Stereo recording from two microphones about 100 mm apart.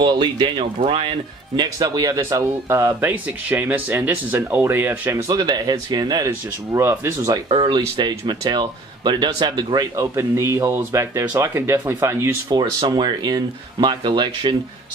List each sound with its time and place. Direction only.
0.0 s speech: 50° right (ahead or behind)
0.7 s speech: 65° right (ahead or behind)
1.6 s speech: 40° right (ahead or behind); by 5.2 s 20° right (ahead or behind)
5.3 s speech: 40° right (ahead or behind); by 7.2 s 25° right (ahead or behind)
7.6 s speech: 50° right (ahead or behind)
9.9 s speech: 25° right (ahead or behind)
12.4 s speech: 45° right (ahead or behind)